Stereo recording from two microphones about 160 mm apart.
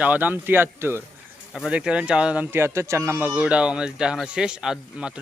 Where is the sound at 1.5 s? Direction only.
5° right (ahead or behind).